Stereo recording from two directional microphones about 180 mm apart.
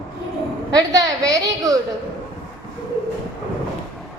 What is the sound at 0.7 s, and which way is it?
A woman's voice, 20° right (ahead or behind).